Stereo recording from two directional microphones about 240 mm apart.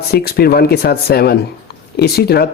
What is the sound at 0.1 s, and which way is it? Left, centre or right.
Speech, left.